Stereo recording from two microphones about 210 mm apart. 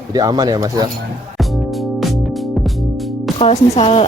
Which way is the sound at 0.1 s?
20° right (ahead or behind).